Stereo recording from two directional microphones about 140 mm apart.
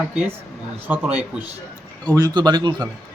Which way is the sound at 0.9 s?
10° right (ahead or behind).